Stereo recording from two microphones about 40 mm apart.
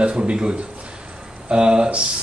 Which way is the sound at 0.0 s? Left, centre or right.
Right.